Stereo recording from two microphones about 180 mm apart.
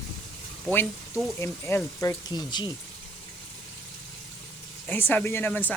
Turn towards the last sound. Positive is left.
turn(degrees=10)  # may be behind; listen again after turning